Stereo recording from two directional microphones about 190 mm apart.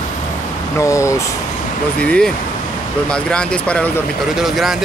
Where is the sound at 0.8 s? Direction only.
15° left (ahead or behind).